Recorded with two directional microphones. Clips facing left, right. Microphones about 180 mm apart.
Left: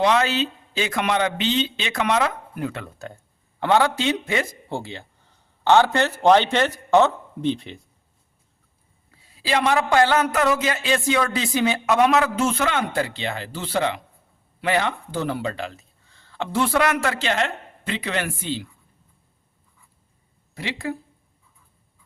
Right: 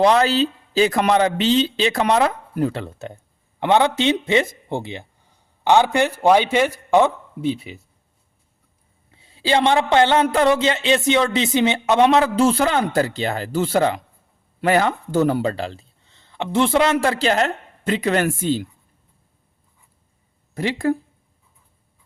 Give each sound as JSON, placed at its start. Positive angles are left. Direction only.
{"t": 0.0, "sound": "speech", "side_deg": -35}
{"t": 3.6, "sound": "a man's voice", "side_deg": -20}
{"t": 9.1, "sound": "a man's voice", "side_deg": -25}
{"t": 20.5, "sound": "speech", "side_deg": -50}